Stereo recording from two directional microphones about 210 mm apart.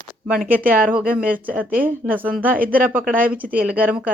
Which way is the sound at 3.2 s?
5° right (ahead or behind).